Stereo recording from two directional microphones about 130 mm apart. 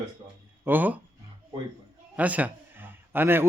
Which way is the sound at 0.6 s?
15° right (ahead or behind).